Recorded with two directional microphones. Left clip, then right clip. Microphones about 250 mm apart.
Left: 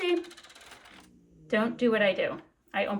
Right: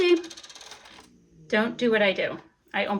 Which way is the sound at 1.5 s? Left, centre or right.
Centre.